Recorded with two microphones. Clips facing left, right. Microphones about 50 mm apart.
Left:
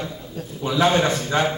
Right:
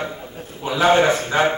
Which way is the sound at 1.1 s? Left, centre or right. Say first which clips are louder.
Right 3 dB; right.